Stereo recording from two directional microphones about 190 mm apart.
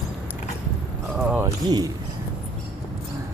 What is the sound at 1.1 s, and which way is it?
Music, 5° right (ahead or behind).